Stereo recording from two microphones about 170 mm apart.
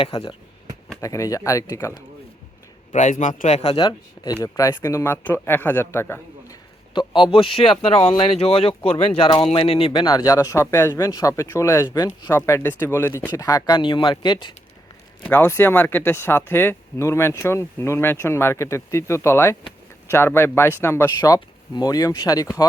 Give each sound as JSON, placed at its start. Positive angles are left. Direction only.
{"t": 0.0, "sound": "speech", "side_deg": 30}
{"t": 1.0, "sound": "speech", "side_deg": 20}
{"t": 2.9, "sound": "speech", "side_deg": 45}
{"t": 3.8, "sound": "speech", "side_deg": 25}
{"t": 6.9, "sound": "speech", "side_deg": 25}
{"t": 15.2, "sound": "speech", "side_deg": 10}